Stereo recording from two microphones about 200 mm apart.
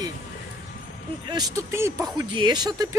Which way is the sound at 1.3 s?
15° right (ahead or behind).